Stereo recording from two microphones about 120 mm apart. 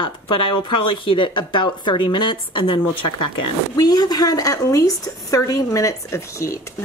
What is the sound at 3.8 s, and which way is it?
A woman's voice, 35° left (ahead or behind).